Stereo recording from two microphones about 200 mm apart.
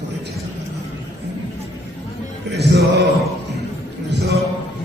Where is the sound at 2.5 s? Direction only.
55° right (ahead or behind).